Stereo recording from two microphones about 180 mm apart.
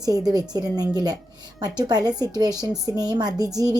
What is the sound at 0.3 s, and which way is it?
A woman's voice, 20° right (ahead or behind).